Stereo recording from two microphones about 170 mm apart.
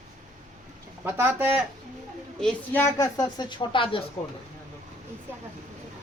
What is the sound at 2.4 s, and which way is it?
Speech, 15° left (ahead or behind).